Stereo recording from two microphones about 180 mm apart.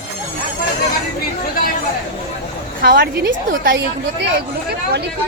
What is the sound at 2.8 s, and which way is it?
A woman's voice, 55° right (ahead or behind).